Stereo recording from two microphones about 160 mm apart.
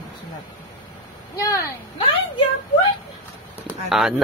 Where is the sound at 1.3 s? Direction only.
20° left (ahead or behind).